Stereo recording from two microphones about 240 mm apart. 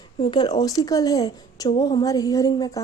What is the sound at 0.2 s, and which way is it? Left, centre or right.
A woman's voice, centre.